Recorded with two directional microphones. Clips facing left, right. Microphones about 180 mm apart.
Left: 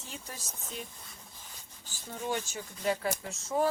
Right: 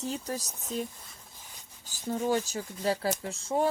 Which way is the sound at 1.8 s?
40° right (ahead or behind).